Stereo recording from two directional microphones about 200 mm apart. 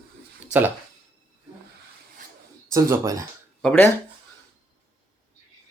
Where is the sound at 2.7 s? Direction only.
15° right (ahead or behind).